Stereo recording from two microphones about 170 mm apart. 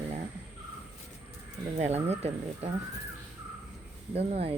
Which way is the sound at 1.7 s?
40° right (ahead or behind).